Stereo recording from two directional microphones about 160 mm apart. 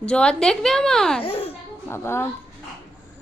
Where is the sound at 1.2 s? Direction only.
40° left (ahead or behind).